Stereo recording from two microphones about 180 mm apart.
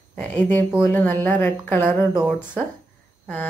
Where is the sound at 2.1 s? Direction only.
5° right (ahead or behind).